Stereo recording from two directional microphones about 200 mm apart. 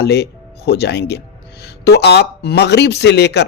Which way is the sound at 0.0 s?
55° left (ahead or behind).